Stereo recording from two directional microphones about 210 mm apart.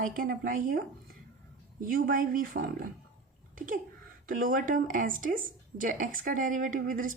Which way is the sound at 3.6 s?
40° right (ahead or behind).